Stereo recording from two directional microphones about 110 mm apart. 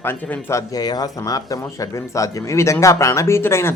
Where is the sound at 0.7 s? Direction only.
35° left (ahead or behind).